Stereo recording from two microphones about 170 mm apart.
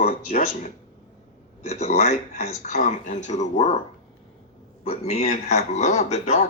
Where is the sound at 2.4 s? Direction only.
55° left (ahead or behind).